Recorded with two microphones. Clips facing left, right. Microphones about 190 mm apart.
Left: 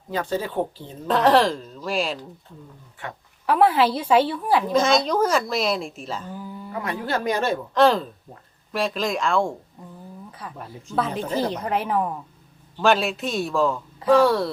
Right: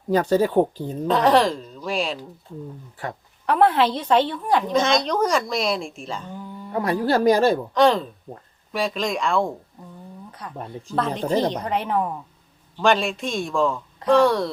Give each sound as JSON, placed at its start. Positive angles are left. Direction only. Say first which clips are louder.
{"t": 0.1, "sound": "speech", "louder": "right 8 dB", "side_deg": -40}
{"t": 1.0, "sound": "a woman's voice", "louder": "even", "side_deg": 0}
{"t": 3.0, "sound": "speech", "louder": "right 4 dB", "side_deg": -35}
{"t": 3.4, "sound": "a woman's voice", "louder": "even", "side_deg": 5}
{"t": 6.7, "sound": "speech", "louder": "right 6 dB", "side_deg": -35}
{"t": 7.7, "sound": "a woman's voice", "louder": "even", "side_deg": 0}
{"t": 11.2, "sound": "speech", "louder": "right 3 dB", "side_deg": -35}
{"t": 11.6, "sound": "a woman's voice", "louder": "even", "side_deg": 0}